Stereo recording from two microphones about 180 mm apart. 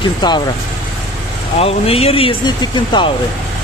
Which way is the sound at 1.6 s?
35° left (ahead or behind).